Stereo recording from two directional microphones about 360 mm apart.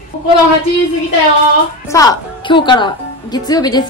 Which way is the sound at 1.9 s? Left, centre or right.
Centre.